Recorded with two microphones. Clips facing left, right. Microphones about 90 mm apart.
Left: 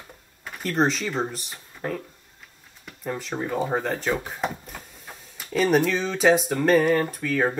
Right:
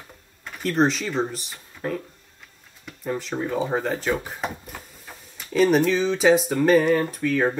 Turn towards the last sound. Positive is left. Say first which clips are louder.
# right 2 dB
turn(degrees=0)  # may be behind; listen again after turning